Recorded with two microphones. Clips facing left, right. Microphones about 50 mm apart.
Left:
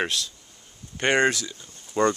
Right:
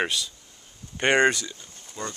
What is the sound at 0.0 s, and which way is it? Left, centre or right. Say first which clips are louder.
Speech: even; centre.